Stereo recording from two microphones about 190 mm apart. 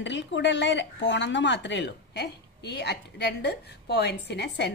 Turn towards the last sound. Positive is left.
turn(degrees=60)  # may be behind; listen again after turning